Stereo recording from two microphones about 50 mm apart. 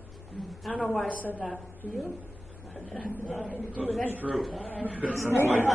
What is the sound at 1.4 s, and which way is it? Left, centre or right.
A woman's voice, centre.